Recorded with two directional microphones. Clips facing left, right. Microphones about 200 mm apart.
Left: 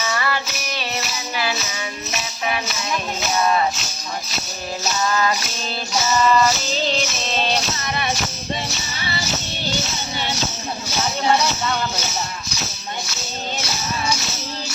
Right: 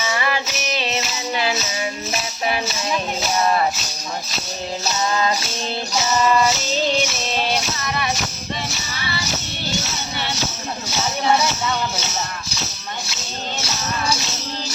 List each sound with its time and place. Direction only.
0.1 s music: 15° right (ahead or behind)
5.0 s music: 20° right (ahead or behind)